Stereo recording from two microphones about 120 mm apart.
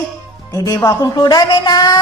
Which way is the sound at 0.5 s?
25° left (ahead or behind).